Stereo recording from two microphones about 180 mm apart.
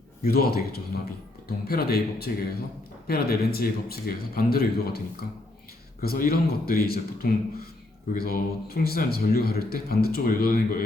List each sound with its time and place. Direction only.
0.2 s a man's voice: 60° left (ahead or behind)